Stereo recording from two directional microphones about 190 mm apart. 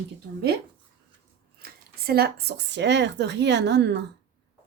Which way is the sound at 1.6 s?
55° right (ahead or behind).